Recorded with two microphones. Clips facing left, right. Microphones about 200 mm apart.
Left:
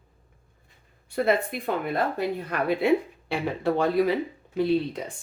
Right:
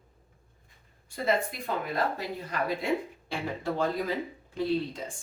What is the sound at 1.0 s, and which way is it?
Speech, 60° left (ahead or behind).